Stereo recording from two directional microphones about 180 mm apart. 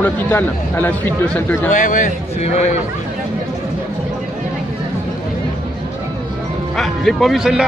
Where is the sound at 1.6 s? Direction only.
45° left (ahead or behind).